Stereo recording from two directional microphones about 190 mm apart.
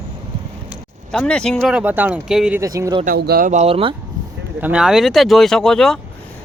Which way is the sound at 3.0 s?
55° right (ahead or behind).